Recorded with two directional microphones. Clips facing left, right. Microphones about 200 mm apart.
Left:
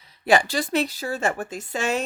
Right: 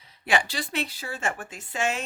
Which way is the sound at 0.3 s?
45° left (ahead or behind).